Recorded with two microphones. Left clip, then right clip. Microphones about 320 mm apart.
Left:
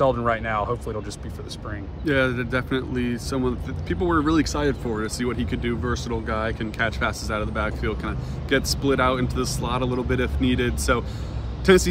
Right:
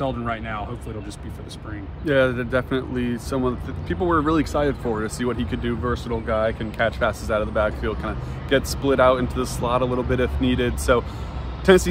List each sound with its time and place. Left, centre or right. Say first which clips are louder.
0.0 s speech: left 5 dB; centre
2.0 s a man's voice: right 3 dB; centre